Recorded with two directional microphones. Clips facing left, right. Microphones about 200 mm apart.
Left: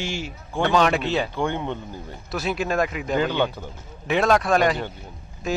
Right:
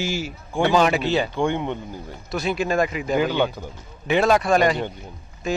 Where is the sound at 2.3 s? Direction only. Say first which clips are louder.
Right 2 dB; centre (ahead or behind).